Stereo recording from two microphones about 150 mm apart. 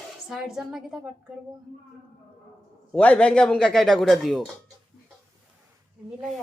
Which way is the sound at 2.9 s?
10° left (ahead or behind).